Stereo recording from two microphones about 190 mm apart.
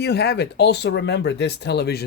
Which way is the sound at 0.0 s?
60° left (ahead or behind).